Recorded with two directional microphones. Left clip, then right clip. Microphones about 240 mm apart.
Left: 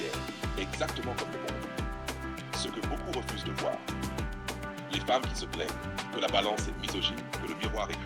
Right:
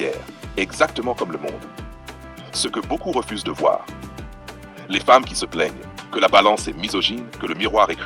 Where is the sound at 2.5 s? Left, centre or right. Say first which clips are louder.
Right 13 dB; right.